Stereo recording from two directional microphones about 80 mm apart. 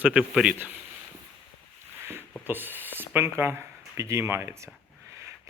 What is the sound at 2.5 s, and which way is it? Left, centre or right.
Speech, right.